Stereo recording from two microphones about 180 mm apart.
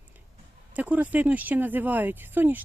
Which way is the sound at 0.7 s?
10° right (ahead or behind).